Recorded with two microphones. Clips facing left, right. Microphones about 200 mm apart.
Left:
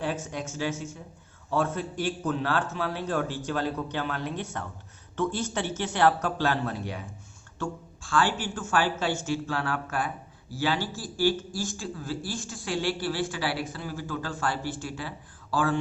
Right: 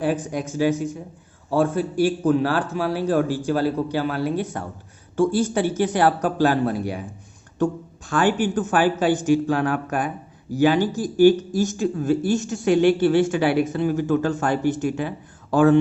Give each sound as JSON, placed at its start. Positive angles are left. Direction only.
{"t": 0.5, "sound": "a woman's voice", "side_deg": -10}